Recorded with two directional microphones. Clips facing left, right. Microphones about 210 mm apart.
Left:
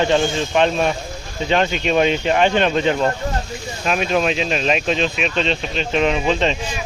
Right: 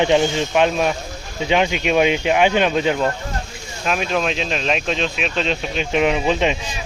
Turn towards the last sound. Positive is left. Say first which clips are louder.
# even
turn(degrees=-10)  # may be behind; listen again after turning